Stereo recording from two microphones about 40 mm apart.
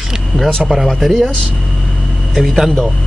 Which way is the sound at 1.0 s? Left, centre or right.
Centre.